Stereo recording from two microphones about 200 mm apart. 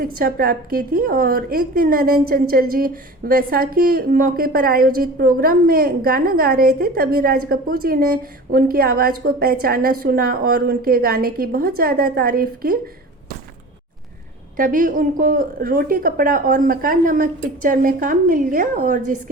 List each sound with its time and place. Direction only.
0.2 s a woman's voice: 45° right (ahead or behind)
14.5 s a woman's voice: 45° right (ahead or behind)